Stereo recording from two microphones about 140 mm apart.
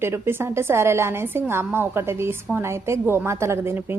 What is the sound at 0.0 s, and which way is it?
A woman's voice, 15° right (ahead or behind).